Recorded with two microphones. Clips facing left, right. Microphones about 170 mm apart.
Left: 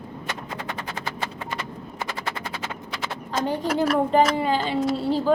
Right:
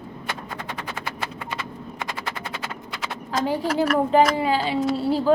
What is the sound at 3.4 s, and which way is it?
A woman's voice, 10° right (ahead or behind).